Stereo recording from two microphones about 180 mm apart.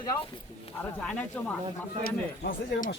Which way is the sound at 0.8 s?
5° left (ahead or behind).